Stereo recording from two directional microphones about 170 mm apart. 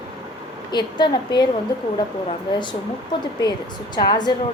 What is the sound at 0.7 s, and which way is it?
Speech, 25° left (ahead or behind).